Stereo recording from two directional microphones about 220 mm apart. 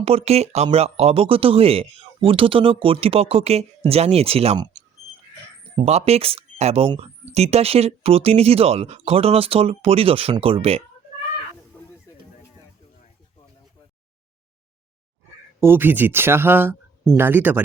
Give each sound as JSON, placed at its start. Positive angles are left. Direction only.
{"t": 0.0, "sound": "speech", "side_deg": -25}
{"t": 5.7, "sound": "speech", "side_deg": -30}
{"t": 11.7, "sound": "a sound", "side_deg": 10}
{"t": 15.6, "sound": "speech", "side_deg": -10}